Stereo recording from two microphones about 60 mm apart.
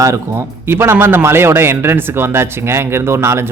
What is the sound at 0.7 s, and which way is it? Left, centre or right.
Speech, right.